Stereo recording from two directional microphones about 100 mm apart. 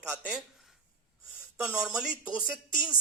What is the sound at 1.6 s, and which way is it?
A man's voice, 10° right (ahead or behind).